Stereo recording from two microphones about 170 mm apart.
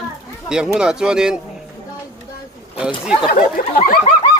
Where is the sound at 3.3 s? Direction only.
55° left (ahead or behind).